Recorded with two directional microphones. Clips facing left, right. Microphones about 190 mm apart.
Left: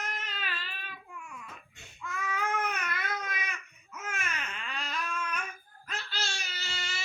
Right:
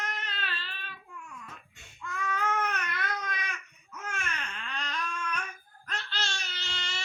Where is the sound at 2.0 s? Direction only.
5° left (ahead or behind).